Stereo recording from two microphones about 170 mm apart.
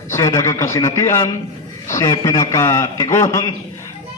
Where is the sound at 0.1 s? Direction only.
15° left (ahead or behind).